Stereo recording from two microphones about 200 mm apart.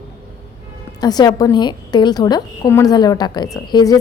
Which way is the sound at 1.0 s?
20° left (ahead or behind).